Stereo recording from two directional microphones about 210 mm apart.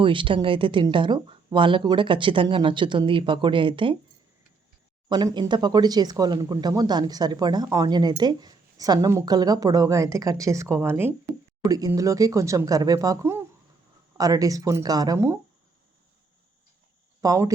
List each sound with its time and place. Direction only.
0.0 s speech: 25° right (ahead or behind)
5.0 s speech: 20° right (ahead or behind)
17.2 s speech: 15° right (ahead or behind)